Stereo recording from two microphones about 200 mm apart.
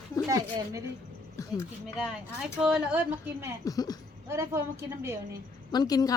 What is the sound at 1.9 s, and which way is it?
Speech, 5° right (ahead or behind).